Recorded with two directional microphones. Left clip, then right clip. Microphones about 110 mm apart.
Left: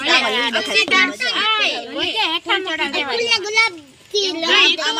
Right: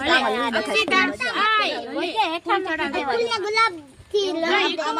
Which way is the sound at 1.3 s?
15° left (ahead or behind).